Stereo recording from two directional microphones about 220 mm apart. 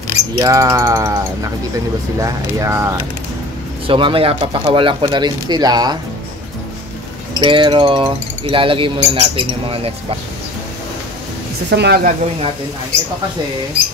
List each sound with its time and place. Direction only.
0.4 s speech: 15° right (ahead or behind)
3.8 s speech: 25° right (ahead or behind)
7.3 s speech: 20° right (ahead or behind)
11.7 s a woman's voice: 50° right (ahead or behind)